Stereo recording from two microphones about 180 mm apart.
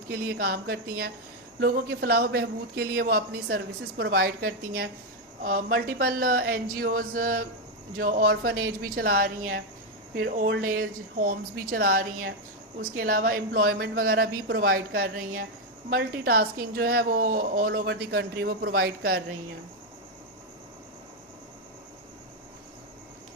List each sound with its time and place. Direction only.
0.1 s a man's voice: 60° right (ahead or behind)